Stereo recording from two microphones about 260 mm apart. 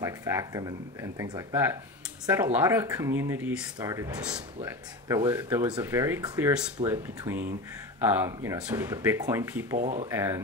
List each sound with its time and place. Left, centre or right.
0.0 s speech: centre
9.8 s speech: right
10.0 s speech: centre